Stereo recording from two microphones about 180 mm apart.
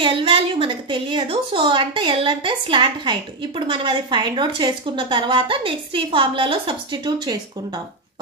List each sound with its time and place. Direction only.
0.0 s a woman's voice: 30° right (ahead or behind)